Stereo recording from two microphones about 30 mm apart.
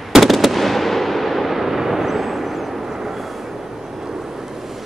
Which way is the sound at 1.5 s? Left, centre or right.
Centre.